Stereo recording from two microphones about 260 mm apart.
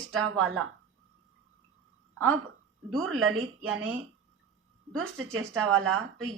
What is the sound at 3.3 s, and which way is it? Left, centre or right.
Speech, right.